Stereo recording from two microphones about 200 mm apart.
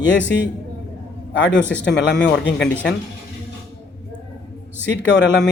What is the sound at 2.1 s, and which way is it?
Speech, 65° left (ahead or behind).